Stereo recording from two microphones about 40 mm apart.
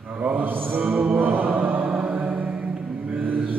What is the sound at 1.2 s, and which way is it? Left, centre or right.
Chant, right.